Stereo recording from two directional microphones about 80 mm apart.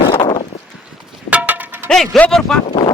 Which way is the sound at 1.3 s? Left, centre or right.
Centre.